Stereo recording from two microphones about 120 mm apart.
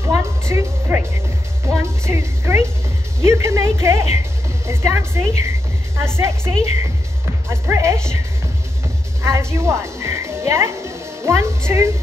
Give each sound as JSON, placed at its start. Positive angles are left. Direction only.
{"t": 0.0, "sound": "music", "side_deg": -25}
{"t": 1.7, "sound": "a woman's voice", "side_deg": -20}
{"t": 9.2, "sound": "a woman's voice", "side_deg": -25}